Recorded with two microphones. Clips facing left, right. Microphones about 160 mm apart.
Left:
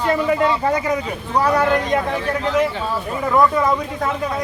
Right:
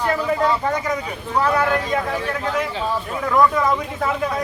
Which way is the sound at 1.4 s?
15° left (ahead or behind).